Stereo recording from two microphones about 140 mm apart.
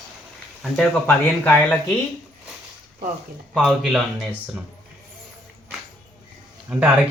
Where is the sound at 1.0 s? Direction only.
15° left (ahead or behind).